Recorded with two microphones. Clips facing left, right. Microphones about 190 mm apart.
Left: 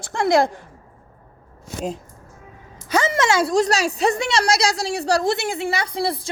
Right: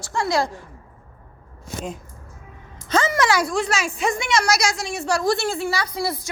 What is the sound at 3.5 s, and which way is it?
A woman's voice, 40° left (ahead or behind).